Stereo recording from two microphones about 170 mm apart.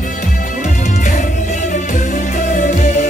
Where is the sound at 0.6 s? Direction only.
50° left (ahead or behind).